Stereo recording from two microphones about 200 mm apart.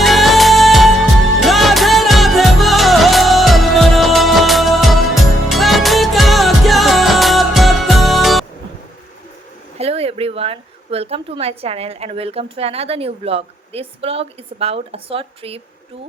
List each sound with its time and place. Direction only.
0.0 s music: centre (ahead or behind)
9.7 s speech: 30° right (ahead or behind)